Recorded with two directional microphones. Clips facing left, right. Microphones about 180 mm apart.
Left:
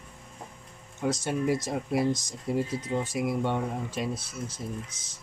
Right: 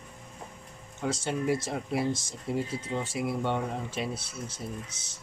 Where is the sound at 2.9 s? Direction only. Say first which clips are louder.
Left 3 dB; 15° left (ahead or behind).